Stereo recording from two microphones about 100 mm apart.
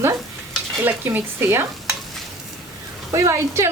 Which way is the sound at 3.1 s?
30° right (ahead or behind).